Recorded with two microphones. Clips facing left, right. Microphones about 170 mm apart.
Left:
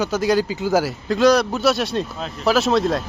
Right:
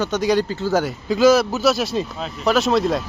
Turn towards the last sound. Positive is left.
turn(degrees=0)  # may be behind; listen again after turning